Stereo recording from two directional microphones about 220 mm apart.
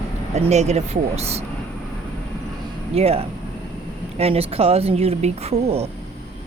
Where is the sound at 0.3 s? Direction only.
30° right (ahead or behind).